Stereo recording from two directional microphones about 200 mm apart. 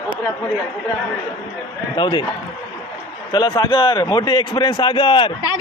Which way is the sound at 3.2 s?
20° left (ahead or behind).